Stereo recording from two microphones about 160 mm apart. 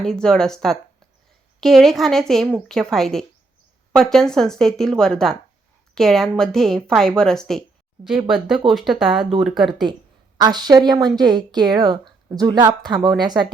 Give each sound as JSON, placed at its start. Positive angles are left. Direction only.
{"t": 0.0, "sound": "a woman's voice", "side_deg": 5}
{"t": 8.7, "sound": "a woman's voice", "side_deg": 0}
{"t": 9.6, "sound": "a woman's voice", "side_deg": -30}